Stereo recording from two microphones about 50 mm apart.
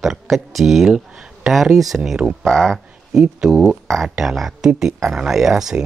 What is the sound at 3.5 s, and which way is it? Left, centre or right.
Speech, centre.